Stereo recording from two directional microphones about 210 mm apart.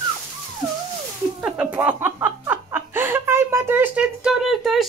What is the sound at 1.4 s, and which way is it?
Chuckle, 5° right (ahead or behind).